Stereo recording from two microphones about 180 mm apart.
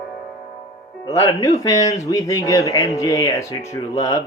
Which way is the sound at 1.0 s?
20° left (ahead or behind).